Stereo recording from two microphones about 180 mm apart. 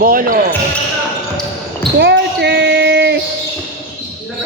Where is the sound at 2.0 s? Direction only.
70° right (ahead or behind).